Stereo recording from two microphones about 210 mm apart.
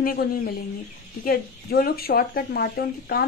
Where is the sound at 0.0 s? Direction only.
45° left (ahead or behind).